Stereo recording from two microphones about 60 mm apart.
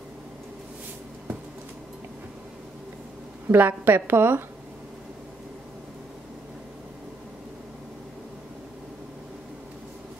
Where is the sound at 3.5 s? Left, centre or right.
Right.